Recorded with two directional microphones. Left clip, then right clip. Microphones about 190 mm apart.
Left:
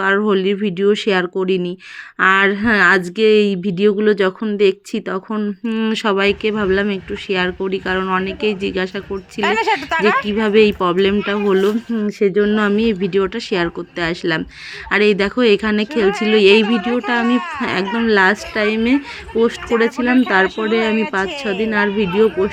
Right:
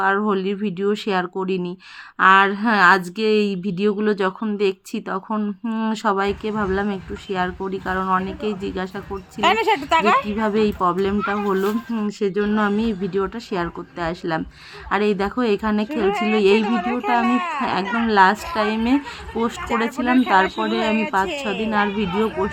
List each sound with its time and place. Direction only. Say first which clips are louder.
0.0 s speech: left 4 dB; 20° left (ahead or behind)
9.4 s speech: left 1 dB; 5° right (ahead or behind)
10.2 s speech: left 7 dB; 15° left (ahead or behind)
16.6 s speech: left 3 dB; 20° right (ahead or behind)
17.6 s speech: left 2 dB; 20° left (ahead or behind)